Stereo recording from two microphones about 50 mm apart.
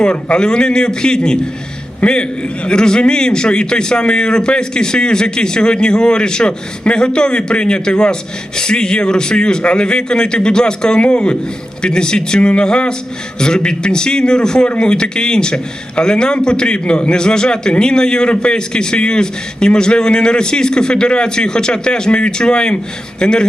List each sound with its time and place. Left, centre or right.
0.0 s a man's voice: centre